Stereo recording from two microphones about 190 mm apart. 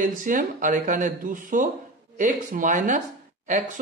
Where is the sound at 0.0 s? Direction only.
45° right (ahead or behind).